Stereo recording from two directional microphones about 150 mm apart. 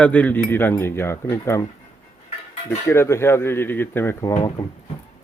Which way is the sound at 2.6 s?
15° left (ahead or behind).